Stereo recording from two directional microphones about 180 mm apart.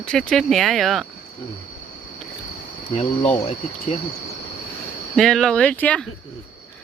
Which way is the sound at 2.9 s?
35° left (ahead or behind).